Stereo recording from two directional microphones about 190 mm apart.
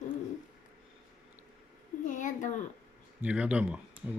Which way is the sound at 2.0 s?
40° left (ahead or behind).